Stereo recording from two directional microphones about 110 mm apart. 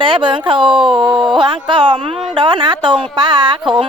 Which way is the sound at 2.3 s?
45° right (ahead or behind).